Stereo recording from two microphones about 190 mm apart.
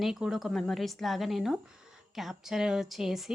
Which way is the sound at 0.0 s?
Centre (ahead or behind).